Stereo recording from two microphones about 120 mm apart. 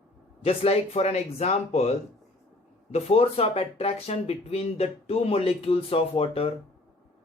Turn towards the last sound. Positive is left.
turn(degrees=55)  # may be behind; listen again after turning